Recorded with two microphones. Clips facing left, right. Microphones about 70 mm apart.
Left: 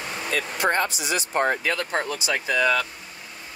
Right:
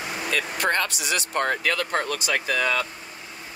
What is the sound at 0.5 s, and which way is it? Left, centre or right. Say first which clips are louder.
Speech: left 3 dB; right.